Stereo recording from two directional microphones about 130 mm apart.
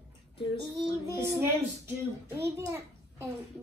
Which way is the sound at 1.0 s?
20° right (ahead or behind).